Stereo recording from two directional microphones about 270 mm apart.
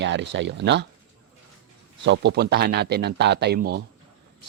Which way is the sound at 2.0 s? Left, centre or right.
Right.